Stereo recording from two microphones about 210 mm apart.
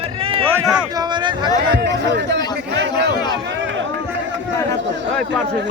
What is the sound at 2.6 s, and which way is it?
Chatter, 55° right (ahead or behind).